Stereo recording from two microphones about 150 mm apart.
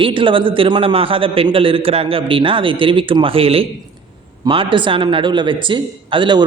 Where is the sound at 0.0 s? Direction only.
35° right (ahead or behind).